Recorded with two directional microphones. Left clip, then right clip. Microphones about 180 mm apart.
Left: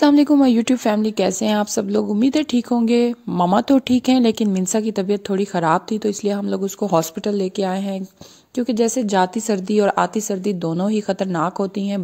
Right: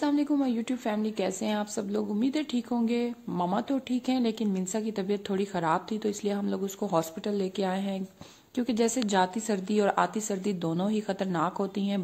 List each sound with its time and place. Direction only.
0.0 s a woman's voice: 55° left (ahead or behind); by 12.0 s 35° left (ahead or behind)